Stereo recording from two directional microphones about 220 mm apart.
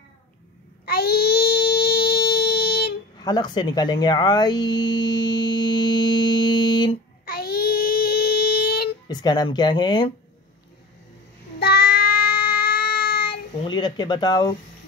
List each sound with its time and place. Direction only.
0.8 s a sound: 45° left (ahead or behind)
3.2 s speech: 20° left (ahead or behind)
7.2 s child singing: 45° left (ahead or behind)
9.0 s speech: 20° left (ahead or behind)
11.6 s child singing: 45° left (ahead or behind)
13.6 s speech: 20° left (ahead or behind)